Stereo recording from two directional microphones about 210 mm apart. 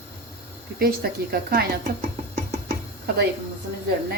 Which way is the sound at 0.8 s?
45° right (ahead or behind).